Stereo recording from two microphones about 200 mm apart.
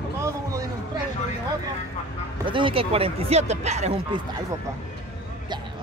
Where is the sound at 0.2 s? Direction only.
15° right (ahead or behind).